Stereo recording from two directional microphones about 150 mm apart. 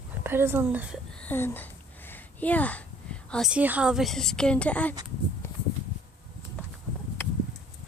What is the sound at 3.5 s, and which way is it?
A woman's voice, 10° right (ahead or behind).